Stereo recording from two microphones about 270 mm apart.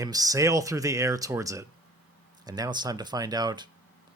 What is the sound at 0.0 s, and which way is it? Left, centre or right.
Speech, centre.